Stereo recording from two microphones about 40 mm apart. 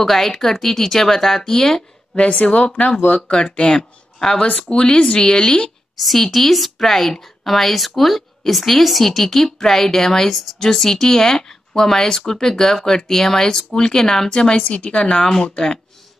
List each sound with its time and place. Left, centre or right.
0.0 s speech: centre
2.1 s speech: left
3.7 s speech: centre
4.4 s speech: left
5.1 s speech: centre
5.9 s speech: centre; by 15.2 s left